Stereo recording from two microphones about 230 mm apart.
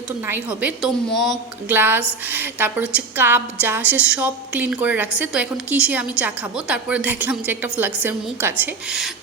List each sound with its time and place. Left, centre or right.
0.3 s a woman's voice: centre